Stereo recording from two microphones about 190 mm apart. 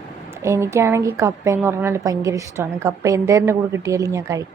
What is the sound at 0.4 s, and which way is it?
A woman's voice, 15° right (ahead or behind).